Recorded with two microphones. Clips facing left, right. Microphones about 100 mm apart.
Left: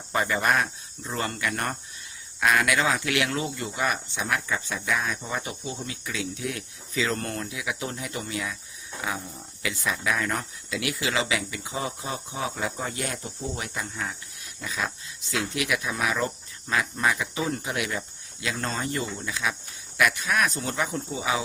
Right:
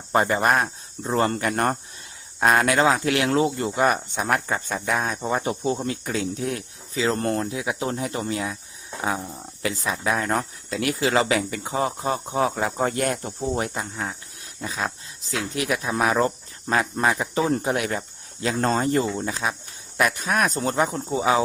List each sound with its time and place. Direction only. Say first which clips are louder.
0.1 s speech: right 4 dB; 40° right (ahead or behind)